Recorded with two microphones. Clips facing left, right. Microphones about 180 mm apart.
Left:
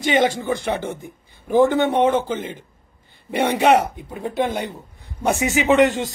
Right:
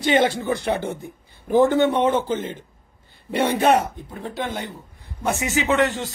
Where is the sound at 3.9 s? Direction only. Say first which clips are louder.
Left 6 dB; 10° left (ahead or behind).